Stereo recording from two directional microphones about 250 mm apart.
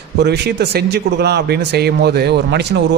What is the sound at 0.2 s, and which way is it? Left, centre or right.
Speech, right.